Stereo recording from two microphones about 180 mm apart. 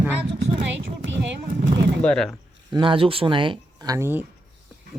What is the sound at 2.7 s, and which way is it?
Speech, 30° right (ahead or behind).